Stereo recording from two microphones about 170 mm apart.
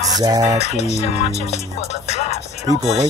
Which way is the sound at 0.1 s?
20° right (ahead or behind).